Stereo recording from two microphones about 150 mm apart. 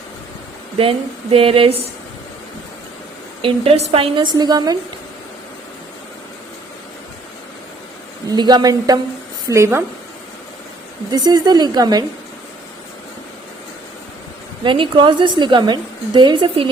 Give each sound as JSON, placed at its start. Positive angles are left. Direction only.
{"t": 0.8, "sound": "a woman's voice", "side_deg": -40}
{"t": 3.4, "sound": "a woman's voice", "side_deg": -40}
{"t": 8.3, "sound": "a woman's voice", "side_deg": -30}
{"t": 11.1, "sound": "a woman's voice", "side_deg": -25}
{"t": 14.6, "sound": "a woman's voice", "side_deg": -35}